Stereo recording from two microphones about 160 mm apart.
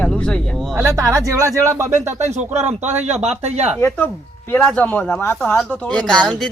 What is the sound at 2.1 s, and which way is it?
Speech, 45° right (ahead or behind).